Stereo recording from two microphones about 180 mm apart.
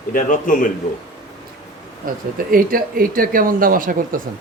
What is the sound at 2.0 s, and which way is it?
Speech, 50° right (ahead or behind).